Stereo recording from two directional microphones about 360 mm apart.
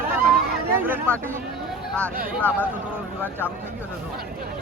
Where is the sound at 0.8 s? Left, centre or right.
Centre.